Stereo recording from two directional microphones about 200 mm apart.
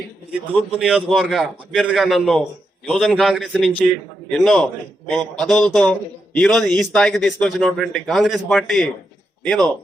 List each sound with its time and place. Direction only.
0.5 s a man's voice: 5° right (ahead or behind)